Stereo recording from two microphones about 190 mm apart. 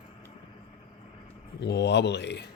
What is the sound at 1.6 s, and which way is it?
Speech, 65° left (ahead or behind).